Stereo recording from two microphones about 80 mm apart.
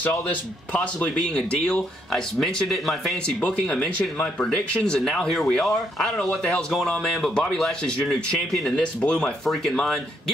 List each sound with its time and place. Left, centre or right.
0.0 s speech: centre
3.3 s speech: centre